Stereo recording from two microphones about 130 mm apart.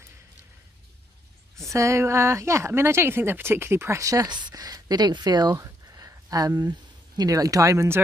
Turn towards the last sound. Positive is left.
turn(degrees=-25)  # may be behind; listen again after turning